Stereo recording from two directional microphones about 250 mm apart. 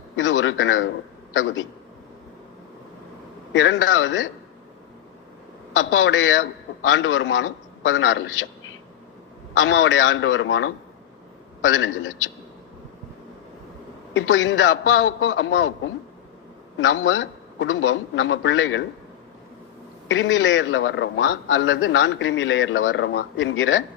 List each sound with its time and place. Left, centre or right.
0.2 s a man's voice: left
3.5 s a man's voice: left
5.7 s a man's voice: left
9.6 s a man's voice: left
14.1 s a man's voice: left
16.7 s a man's voice: left
20.1 s a man's voice: left